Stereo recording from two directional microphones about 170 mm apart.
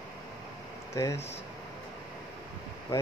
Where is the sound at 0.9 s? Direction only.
15° left (ahead or behind).